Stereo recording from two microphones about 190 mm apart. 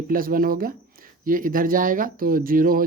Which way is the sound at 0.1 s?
50° right (ahead or behind).